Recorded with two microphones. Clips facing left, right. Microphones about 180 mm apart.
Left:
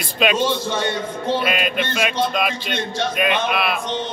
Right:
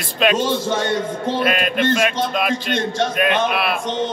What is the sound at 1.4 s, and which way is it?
Speech, centre (ahead or behind).